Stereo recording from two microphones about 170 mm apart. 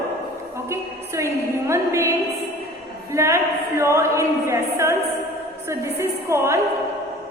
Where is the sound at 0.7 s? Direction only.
15° right (ahead or behind).